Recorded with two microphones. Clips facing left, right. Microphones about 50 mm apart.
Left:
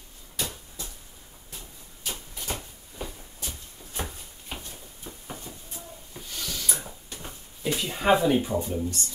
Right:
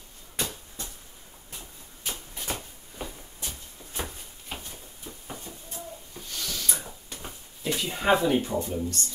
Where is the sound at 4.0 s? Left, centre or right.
Centre.